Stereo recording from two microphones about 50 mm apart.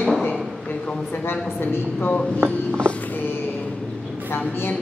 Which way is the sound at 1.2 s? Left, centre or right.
Left.